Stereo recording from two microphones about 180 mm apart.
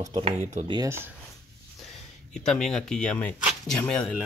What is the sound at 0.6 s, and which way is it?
Speech, 20° right (ahead or behind).